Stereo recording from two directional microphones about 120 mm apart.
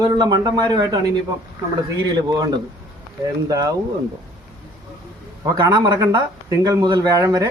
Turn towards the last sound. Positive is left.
turn(degrees=-30)  # may be behind; listen again after turning